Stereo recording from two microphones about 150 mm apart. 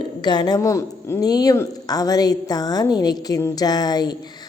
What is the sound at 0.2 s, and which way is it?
A woman's voice, 30° left (ahead or behind).